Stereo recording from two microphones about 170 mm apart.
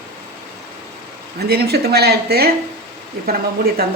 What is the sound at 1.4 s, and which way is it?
Speech, 70° right (ahead or behind).